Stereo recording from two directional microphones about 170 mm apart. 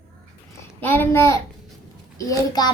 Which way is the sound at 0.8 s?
10° left (ahead or behind).